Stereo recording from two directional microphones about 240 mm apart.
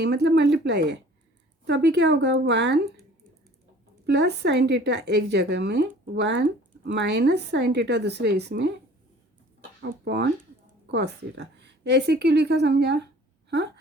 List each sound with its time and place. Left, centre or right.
0.0 s a woman's voice: right
4.0 s a woman's voice: right
10.0 s a woman's voice: right